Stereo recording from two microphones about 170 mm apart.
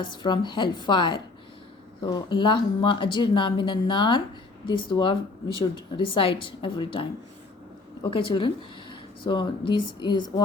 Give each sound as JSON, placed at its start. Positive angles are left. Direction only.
{"t": 0.0, "sound": "speech", "side_deg": 25}